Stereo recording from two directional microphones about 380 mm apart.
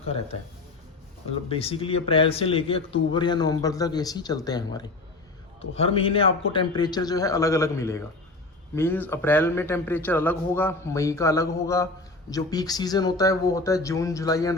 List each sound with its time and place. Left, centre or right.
0.0 s a man's voice: centre
1.5 s a man's voice: centre